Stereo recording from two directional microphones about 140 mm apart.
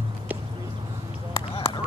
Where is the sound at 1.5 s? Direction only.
40° left (ahead or behind).